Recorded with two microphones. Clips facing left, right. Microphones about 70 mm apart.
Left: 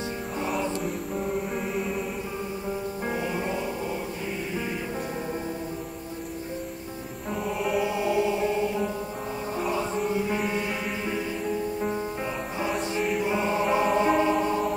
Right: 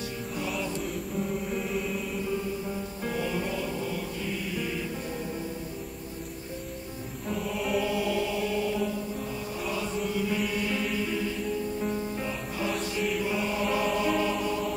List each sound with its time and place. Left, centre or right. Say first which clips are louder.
3.1 s music: left 1 dB; left
7.4 s music: left 3 dB; centre
7.8 s music: left 3 dB; left
13.2 s music: left 4 dB; left